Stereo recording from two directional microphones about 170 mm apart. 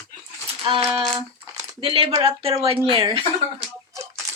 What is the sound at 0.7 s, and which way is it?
Speech, 30° right (ahead or behind).